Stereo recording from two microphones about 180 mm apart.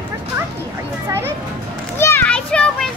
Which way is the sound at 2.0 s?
10° left (ahead or behind).